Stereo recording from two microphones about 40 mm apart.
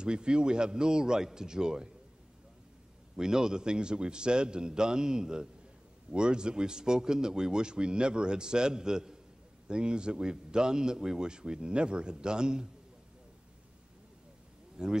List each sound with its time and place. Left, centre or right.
0.0 s a man's voice: right
3.2 s a man's voice: centre
14.8 s speech: centre